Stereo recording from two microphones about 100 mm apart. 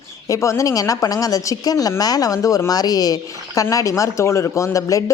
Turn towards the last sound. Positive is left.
turn(degrees=35)  # may be behind; listen again after turning